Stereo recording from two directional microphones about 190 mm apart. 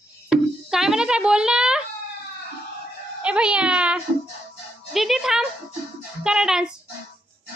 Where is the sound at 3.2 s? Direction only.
5° right (ahead or behind).